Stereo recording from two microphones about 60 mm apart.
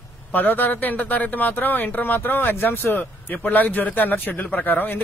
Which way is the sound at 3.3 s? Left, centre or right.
Left.